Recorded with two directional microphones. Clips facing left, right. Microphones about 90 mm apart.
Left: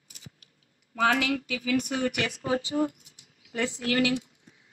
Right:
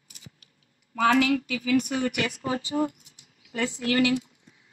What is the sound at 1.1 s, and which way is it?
Speech, 5° left (ahead or behind).